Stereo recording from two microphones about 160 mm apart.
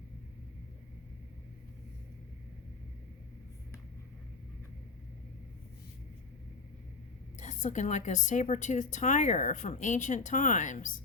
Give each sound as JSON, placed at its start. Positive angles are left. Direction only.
{"t": 7.3, "sound": "a woman's voice", "side_deg": 50}